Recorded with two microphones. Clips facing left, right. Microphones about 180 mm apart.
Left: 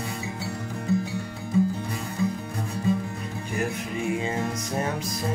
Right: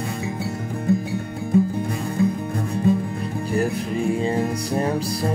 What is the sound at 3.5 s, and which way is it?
Music, 35° right (ahead or behind).